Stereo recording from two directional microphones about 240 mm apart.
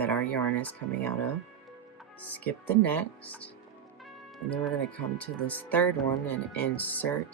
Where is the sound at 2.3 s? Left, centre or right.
Centre.